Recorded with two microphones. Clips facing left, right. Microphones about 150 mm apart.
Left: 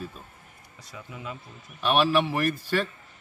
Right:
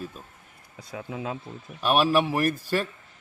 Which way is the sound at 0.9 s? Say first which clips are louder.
Right 6 dB; 90° right.